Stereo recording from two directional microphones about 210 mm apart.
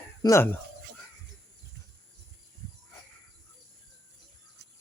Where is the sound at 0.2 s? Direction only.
15° left (ahead or behind).